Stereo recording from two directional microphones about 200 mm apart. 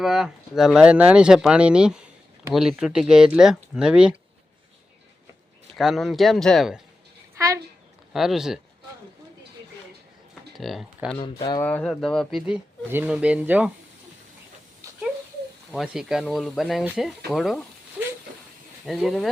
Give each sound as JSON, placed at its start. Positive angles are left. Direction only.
{"t": 0.0, "sound": "speech", "side_deg": 0}
{"t": 5.7, "sound": "speech", "side_deg": 0}
{"t": 7.3, "sound": "a woman's voice", "side_deg": -15}
{"t": 8.1, "sound": "speech", "side_deg": 0}
{"t": 10.6, "sound": "speech", "side_deg": 0}
{"t": 11.2, "sound": "speech", "side_deg": 20}
{"t": 11.6, "sound": "speech", "side_deg": 5}
{"t": 15.7, "sound": "speech", "side_deg": 0}
{"t": 18.0, "sound": "a sound", "side_deg": -5}
{"t": 18.9, "sound": "speech", "side_deg": 0}